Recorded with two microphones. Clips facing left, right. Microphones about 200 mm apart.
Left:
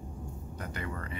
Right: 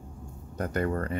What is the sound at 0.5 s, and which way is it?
Speech, 50° right (ahead or behind).